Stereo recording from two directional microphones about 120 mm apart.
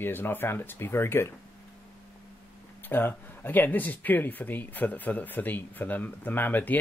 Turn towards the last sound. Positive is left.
turn(degrees=15)  # may be behind; listen again after turning